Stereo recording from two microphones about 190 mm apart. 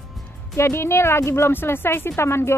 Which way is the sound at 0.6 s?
15° left (ahead or behind).